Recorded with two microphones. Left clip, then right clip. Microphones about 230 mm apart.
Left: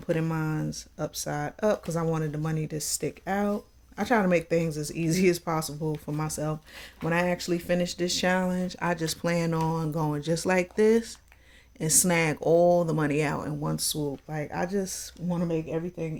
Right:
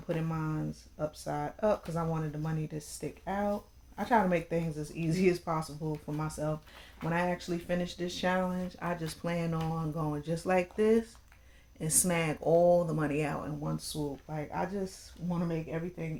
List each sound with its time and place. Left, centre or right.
0.1 s speech: left